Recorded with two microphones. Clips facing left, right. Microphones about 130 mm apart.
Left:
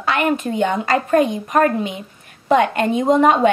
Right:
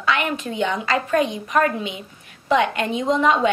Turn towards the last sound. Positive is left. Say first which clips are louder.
# left 5 dB
turn(degrees=50)  # may be behind; listen again after turning